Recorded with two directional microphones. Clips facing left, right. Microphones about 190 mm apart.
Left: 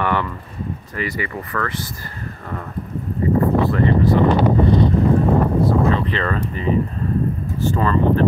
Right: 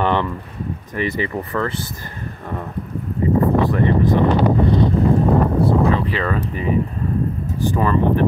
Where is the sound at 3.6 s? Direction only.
15° right (ahead or behind).